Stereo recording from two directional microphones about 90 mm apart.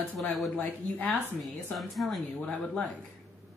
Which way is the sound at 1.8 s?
Centre (ahead or behind).